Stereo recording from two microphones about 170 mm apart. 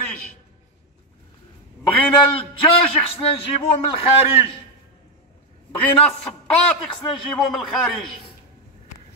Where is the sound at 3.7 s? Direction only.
35° left (ahead or behind).